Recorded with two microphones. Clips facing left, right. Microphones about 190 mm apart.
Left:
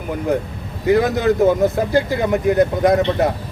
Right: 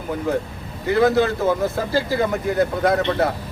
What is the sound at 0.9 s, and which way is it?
Speech, 20° left (ahead or behind).